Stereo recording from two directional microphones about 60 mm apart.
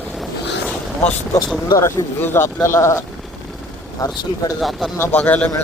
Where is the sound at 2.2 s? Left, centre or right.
Left.